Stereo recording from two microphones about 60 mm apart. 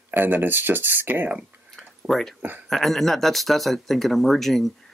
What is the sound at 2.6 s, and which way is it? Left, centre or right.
Speech, centre.